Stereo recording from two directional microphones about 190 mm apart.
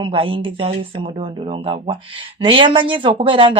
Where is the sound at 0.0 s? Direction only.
30° right (ahead or behind).